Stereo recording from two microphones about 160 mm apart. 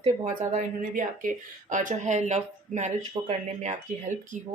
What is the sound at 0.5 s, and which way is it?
A woman's voice, 55° right (ahead or behind).